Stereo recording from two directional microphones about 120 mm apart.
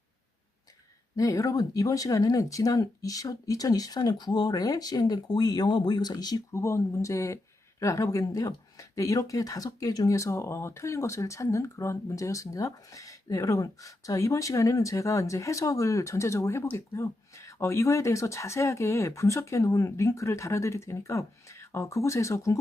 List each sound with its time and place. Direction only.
1.1 s speech: 30° left (ahead or behind)